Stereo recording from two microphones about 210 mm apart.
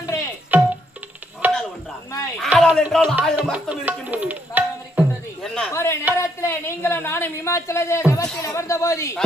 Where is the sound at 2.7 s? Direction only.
Centre (ahead or behind).